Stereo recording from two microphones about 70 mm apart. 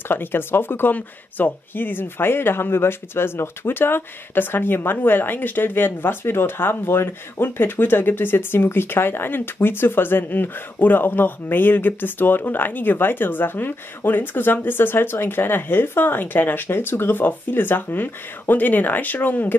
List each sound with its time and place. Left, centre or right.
0.1 s speech: left